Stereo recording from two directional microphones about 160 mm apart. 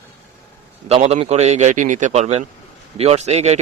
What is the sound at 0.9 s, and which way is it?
Speech, 40° right (ahead or behind).